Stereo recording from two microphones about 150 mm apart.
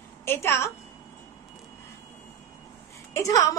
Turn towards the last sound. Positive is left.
turn(degrees=20)  # may be behind; listen again after turning